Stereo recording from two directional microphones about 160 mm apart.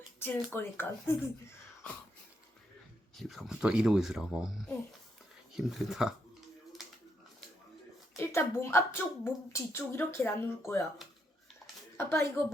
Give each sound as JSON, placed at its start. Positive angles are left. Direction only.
{"t": 0.2, "sound": "speech", "side_deg": 15}
{"t": 3.2, "sound": "speech", "side_deg": 0}
{"t": 8.1, "sound": "speech", "side_deg": 15}
{"t": 11.9, "sound": "speech", "side_deg": 15}